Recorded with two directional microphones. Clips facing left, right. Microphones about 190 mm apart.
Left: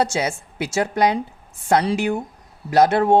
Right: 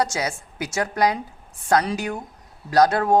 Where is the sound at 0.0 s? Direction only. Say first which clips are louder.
Left 3 dB; 25° left (ahead or behind).